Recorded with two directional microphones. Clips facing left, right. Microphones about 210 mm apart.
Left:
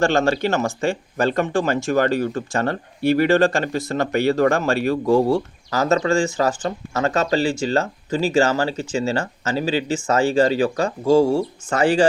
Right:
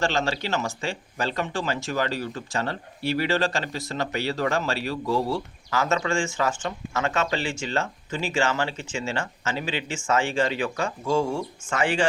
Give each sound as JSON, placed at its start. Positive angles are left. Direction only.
{"t": 0.0, "sound": "speech", "side_deg": 50}